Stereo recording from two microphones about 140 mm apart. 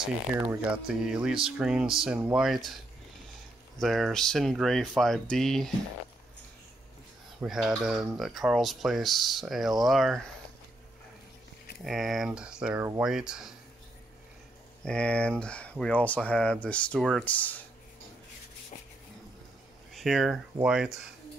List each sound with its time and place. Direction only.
0.0 s speech: 10° right (ahead or behind)
7.3 s speech: 5° right (ahead or behind)
11.8 s speech: centre (ahead or behind)
14.9 s speech: 10° left (ahead or behind)
19.9 s speech: centre (ahead or behind)